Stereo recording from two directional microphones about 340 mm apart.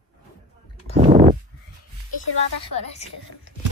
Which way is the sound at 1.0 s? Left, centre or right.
Right.